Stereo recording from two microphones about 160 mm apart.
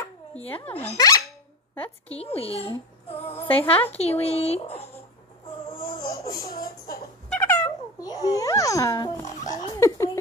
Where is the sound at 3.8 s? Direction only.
40° left (ahead or behind).